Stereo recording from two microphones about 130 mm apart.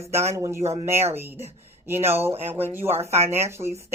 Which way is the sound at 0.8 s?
20° right (ahead or behind).